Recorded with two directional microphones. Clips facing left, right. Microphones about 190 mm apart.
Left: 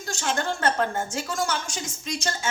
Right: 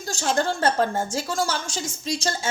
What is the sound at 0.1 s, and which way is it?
A woman's voice, 35° right (ahead or behind).